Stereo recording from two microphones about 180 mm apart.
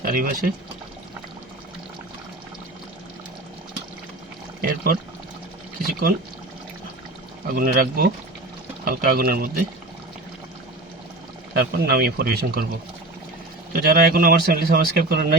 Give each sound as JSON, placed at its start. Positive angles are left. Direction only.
{"t": 0.0, "sound": "speech", "side_deg": -50}
{"t": 4.6, "sound": "speech", "side_deg": -55}
{"t": 7.4, "sound": "speech", "side_deg": -50}
{"t": 11.5, "sound": "speech", "side_deg": -60}
{"t": 13.7, "sound": "speech", "side_deg": -55}